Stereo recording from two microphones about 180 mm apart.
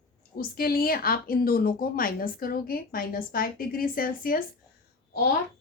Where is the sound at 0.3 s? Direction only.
55° left (ahead or behind).